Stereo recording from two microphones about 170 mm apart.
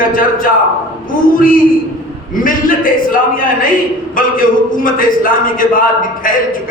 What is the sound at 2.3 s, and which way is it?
Speech, 55° left (ahead or behind).